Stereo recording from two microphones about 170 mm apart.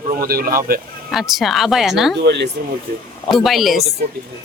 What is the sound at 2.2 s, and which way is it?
Speech, 90° right.